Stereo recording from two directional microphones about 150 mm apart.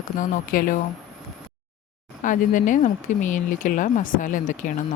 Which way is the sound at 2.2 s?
60° left (ahead or behind).